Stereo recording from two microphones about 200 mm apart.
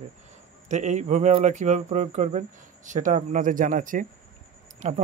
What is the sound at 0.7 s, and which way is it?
A man's voice, 35° right (ahead or behind).